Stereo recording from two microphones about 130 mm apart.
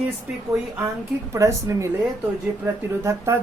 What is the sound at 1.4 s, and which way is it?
Speech, 25° right (ahead or behind).